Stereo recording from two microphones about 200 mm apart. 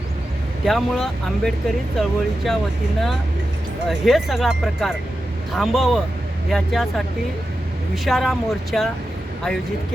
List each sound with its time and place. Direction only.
0.6 s speech: centre (ahead or behind)
3.8 s speech: centre (ahead or behind)
8.0 s speech: centre (ahead or behind)